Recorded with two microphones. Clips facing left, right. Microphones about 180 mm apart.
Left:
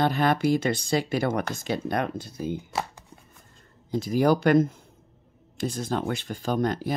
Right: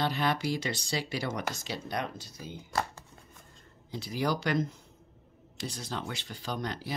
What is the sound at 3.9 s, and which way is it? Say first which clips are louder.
Speech: left 10 dB; 45° left (ahead or behind).